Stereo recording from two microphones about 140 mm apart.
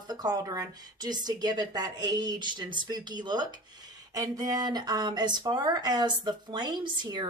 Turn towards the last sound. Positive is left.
turn(degrees=-30)  # may be behind; listen again after turning